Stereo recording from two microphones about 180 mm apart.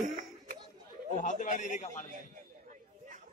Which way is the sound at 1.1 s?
45° left (ahead or behind).